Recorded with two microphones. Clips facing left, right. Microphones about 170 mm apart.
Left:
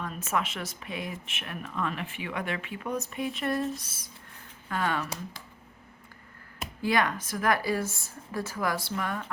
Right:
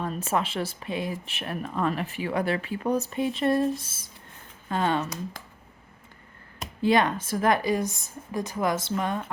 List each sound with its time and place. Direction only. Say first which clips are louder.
0.0 s a woman's voice: right 4 dB; 30° right (ahead or behind)
6.8 s a woman's voice: right 5 dB; 25° right (ahead or behind)